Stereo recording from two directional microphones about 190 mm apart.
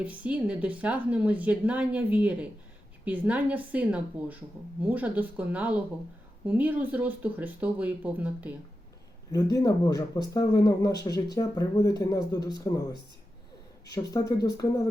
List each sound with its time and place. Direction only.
0.0 s a woman's voice: 10° right (ahead or behind)
9.3 s speech: 20° left (ahead or behind)